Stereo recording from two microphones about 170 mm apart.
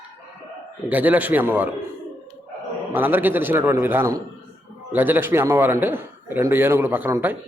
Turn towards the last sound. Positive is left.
turn(degrees=-15)  # may be behind; listen again after turning